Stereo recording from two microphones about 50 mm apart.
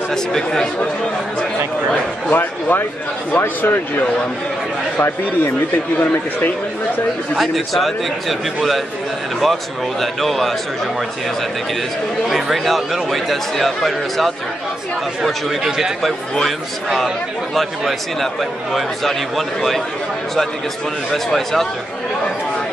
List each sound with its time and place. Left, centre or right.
0.1 s speech: centre
2.2 s speech: left
5.9 s speech: left
7.3 s a man's voice: centre
9.4 s a man's voice: centre
12.3 s a man's voice: centre
21.1 s speech: centre